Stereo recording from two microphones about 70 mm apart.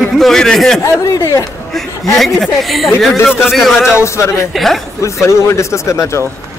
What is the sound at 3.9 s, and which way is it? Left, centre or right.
Speech, left.